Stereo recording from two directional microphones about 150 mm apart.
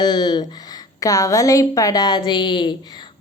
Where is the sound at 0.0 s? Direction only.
25° left (ahead or behind).